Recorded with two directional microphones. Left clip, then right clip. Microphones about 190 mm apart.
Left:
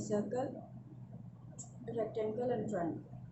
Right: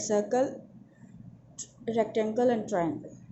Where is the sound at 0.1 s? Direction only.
40° right (ahead or behind).